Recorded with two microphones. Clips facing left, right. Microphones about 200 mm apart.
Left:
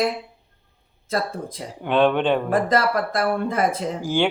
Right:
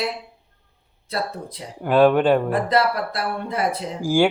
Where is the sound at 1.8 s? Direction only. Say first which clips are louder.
Right 3 dB; 5° right (ahead or behind).